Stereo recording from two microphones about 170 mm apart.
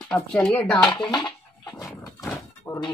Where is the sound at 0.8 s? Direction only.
25° left (ahead or behind).